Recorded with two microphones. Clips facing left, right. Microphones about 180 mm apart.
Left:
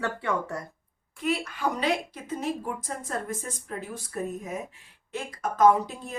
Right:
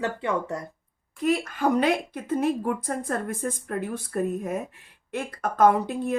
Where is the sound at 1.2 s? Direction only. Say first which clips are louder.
Right 5 dB; 45° right (ahead or behind).